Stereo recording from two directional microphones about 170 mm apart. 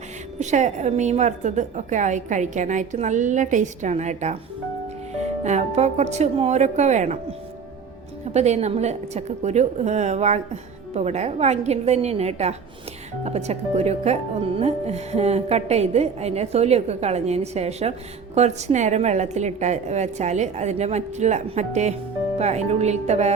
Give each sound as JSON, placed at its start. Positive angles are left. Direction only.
{"t": 0.3, "sound": "a woman's voice", "side_deg": -45}